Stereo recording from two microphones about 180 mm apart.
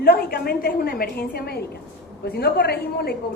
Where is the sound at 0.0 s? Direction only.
55° left (ahead or behind).